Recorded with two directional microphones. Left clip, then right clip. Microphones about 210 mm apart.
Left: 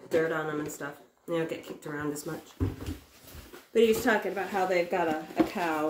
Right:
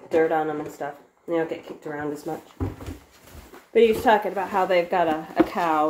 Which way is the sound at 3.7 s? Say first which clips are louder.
Right 6 dB; 10° left (ahead or behind).